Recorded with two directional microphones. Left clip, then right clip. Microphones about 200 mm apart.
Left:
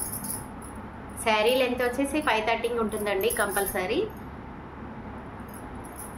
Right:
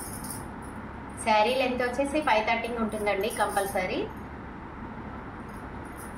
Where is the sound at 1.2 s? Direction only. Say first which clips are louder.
Left 1 dB; 50° left (ahead or behind).